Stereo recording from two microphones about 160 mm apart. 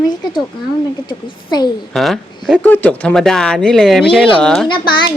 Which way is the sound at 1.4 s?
25° left (ahead or behind).